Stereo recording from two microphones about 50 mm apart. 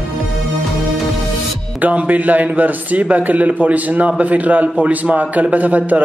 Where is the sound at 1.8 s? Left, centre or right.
Right.